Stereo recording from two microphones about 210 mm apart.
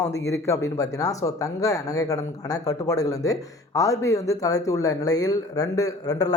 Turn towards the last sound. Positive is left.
turn(degrees=15)  # may be behind; listen again after turning